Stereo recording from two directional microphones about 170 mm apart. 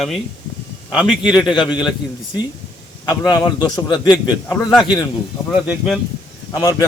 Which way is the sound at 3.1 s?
25° left (ahead or behind).